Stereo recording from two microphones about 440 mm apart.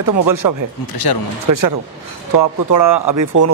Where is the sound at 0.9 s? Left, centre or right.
Left.